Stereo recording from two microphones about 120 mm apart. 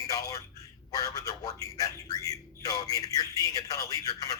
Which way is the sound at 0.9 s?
30° left (ahead or behind).